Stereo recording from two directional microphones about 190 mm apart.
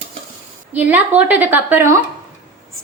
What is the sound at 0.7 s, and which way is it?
A woman's voice, 10° right (ahead or behind).